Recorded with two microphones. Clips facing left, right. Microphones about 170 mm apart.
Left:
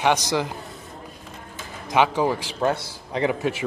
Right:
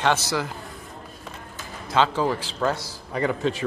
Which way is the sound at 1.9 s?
15° left (ahead or behind).